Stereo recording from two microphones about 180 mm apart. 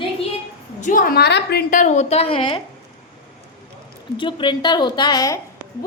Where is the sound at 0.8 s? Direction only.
45° left (ahead or behind); by 1.6 s 65° left (ahead or behind).